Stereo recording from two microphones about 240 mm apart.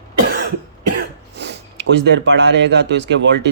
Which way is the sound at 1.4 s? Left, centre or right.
Right.